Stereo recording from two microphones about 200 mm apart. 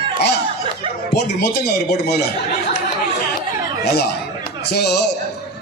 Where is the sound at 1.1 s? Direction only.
55° left (ahead or behind).